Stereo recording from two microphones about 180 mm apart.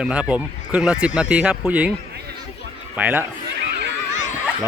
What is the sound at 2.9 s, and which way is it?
Speech, 10° right (ahead or behind).